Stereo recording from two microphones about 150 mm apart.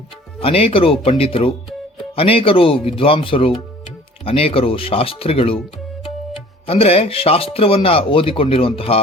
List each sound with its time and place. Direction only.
0.3 s speech: 40° left (ahead or behind)
6.7 s speech: 40° left (ahead or behind)